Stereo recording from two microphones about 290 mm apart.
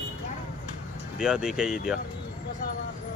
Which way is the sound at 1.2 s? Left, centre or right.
Centre.